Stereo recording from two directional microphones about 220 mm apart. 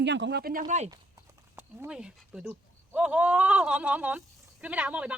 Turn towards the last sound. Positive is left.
turn(degrees=-5)  # may be behind; listen again after turning